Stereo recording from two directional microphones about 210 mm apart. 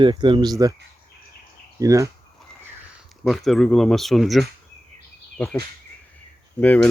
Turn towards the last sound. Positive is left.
turn(degrees=5)  # may be behind; listen again after turning